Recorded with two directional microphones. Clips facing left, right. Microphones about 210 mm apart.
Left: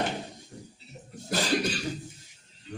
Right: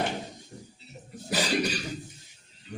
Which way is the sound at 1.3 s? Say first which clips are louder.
Even; centre (ahead or behind).